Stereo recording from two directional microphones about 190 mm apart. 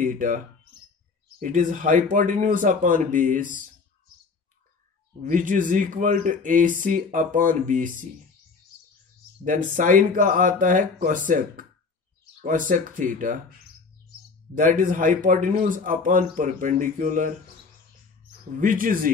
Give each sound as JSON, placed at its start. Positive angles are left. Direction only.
{"t": 0.0, "sound": "speech", "side_deg": -45}
{"t": 1.4, "sound": "speech", "side_deg": -45}
{"t": 5.2, "sound": "speech", "side_deg": -45}
{"t": 9.4, "sound": "speech", "side_deg": -45}
{"t": 14.5, "sound": "speech", "side_deg": -45}
{"t": 18.6, "sound": "speech", "side_deg": -45}